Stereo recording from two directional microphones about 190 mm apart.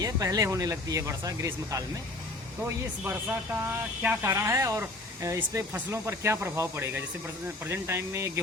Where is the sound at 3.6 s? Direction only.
10° right (ahead or behind).